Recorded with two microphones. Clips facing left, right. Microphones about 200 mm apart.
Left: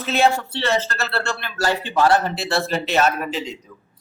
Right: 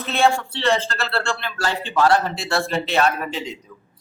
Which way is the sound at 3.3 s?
Centre (ahead or behind).